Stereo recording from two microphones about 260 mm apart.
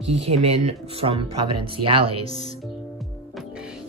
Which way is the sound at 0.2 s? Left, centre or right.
Right.